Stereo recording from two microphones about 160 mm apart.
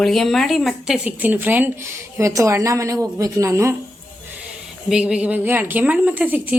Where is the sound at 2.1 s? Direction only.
20° right (ahead or behind).